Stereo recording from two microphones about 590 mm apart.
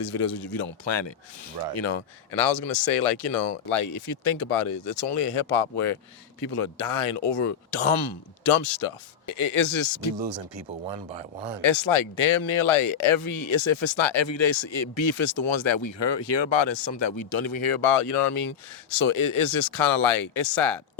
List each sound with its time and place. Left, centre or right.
0.1 s speech: left
2.4 s speech: centre
3.1 s speech: left
10.2 s speech: right
10.8 s speech: centre
11.6 s speech: left